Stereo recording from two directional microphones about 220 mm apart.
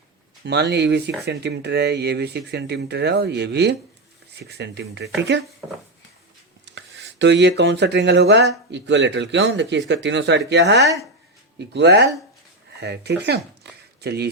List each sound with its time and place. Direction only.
0.4 s speech: 50° right (ahead or behind)
6.7 s speech: 55° right (ahead or behind)